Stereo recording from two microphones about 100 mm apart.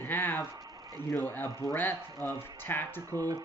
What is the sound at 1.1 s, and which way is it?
Speech, 20° left (ahead or behind).